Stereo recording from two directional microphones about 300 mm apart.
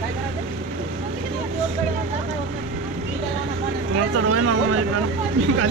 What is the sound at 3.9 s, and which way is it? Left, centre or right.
Vehicle, right.